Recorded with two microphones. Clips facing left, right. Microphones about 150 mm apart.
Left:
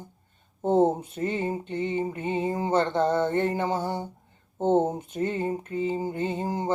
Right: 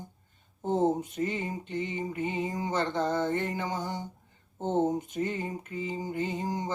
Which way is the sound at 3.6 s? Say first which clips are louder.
Left 6 dB; 55° left (ahead or behind).